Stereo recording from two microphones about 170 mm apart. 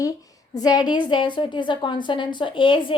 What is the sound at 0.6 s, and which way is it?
A woman's voice, 20° left (ahead or behind).